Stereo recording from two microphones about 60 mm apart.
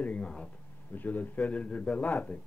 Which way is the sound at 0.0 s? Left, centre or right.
Left.